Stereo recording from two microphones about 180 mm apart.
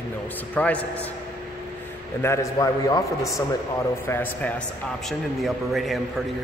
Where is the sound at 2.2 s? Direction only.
15° left (ahead or behind).